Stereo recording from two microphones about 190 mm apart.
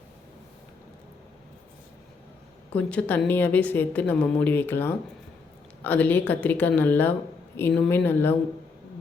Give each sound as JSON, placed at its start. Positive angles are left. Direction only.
{"t": 2.7, "sound": "a woman's voice", "side_deg": 10}